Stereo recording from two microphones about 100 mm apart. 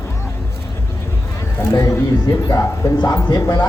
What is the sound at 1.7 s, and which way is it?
Speech, 35° left (ahead or behind).